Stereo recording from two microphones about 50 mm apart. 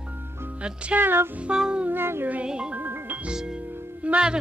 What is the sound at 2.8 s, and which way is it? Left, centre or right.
Music, right.